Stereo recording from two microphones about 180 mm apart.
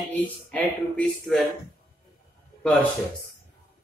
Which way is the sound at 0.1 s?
10° left (ahead or behind).